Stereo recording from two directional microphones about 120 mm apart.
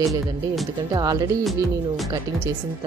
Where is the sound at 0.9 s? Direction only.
30° right (ahead or behind).